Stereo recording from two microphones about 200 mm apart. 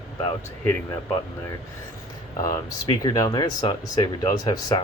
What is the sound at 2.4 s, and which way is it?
Speech, 15° left (ahead or behind).